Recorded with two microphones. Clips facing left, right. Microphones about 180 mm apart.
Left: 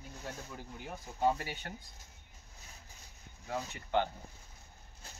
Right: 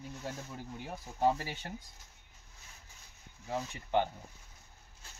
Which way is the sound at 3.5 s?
20° right (ahead or behind).